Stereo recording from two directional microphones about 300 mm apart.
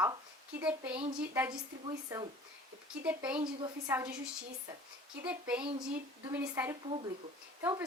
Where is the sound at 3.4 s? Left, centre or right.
Centre.